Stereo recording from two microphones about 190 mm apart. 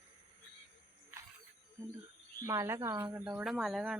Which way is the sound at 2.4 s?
15° right (ahead or behind).